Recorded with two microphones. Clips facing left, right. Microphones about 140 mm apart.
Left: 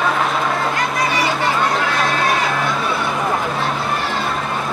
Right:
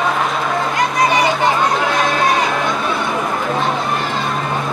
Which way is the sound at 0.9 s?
20° right (ahead or behind).